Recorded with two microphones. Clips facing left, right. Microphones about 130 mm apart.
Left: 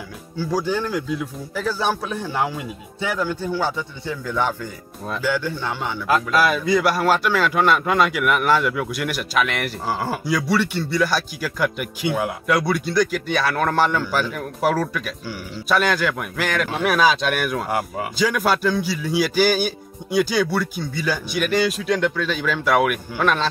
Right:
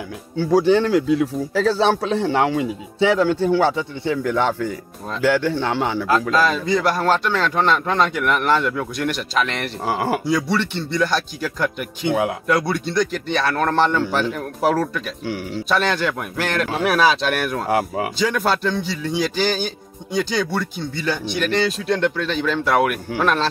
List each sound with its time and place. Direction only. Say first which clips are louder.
0.7 s a man's voice: right 8 dB; 80° right
6.3 s speech: even; 10° left (ahead or behind)
9.8 s speech: right 5 dB; 20° right (ahead or behind)
10.2 s speech: even; centre (ahead or behind)